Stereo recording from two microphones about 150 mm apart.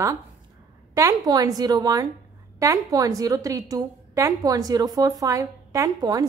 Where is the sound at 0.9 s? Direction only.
25° right (ahead or behind).